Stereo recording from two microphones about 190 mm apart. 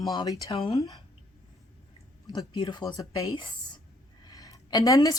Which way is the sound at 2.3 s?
20° left (ahead or behind).